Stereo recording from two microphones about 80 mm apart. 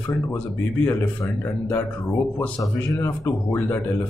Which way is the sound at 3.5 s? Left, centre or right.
Left.